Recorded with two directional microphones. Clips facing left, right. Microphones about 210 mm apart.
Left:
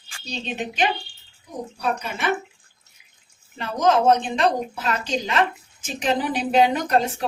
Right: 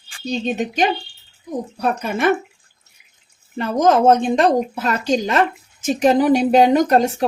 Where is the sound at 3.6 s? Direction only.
45° right (ahead or behind).